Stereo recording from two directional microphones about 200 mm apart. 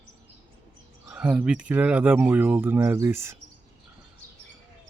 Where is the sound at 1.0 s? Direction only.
5° right (ahead or behind).